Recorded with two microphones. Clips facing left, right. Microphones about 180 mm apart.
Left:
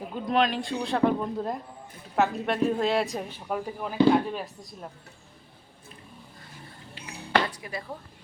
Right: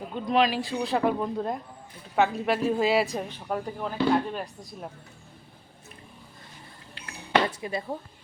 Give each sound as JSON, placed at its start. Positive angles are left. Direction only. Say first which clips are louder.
{"t": 0.1, "sound": "a woman's voice", "louder": "right 1 dB", "side_deg": 0}
{"t": 7.5, "sound": "speech", "louder": "right 5 dB", "side_deg": -25}